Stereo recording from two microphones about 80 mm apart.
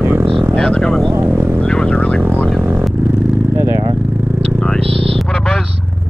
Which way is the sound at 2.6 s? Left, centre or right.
Right.